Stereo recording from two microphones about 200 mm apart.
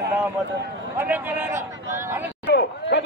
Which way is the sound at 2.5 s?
60° left (ahead or behind).